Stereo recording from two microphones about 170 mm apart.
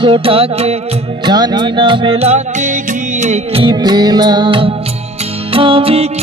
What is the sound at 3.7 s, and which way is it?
Music, 25° right (ahead or behind).